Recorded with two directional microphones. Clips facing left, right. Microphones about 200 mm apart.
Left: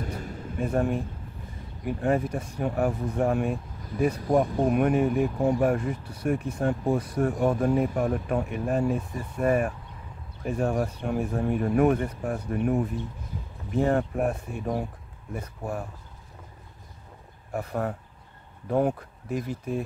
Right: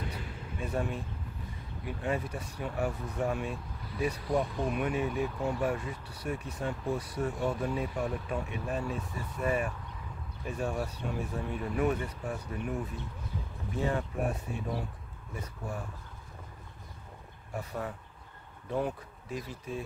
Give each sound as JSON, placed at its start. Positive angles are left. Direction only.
{"t": 0.0, "sound": "vehicle", "side_deg": 45}
{"t": 1.9, "sound": "speech", "side_deg": 50}
{"t": 17.5, "sound": "speech", "side_deg": 55}